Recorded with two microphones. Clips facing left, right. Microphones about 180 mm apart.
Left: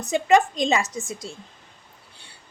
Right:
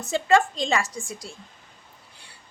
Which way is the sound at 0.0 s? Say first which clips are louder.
Left 2 dB; 15° left (ahead or behind).